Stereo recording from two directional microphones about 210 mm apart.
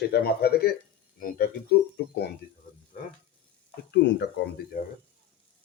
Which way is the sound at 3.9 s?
55° left (ahead or behind).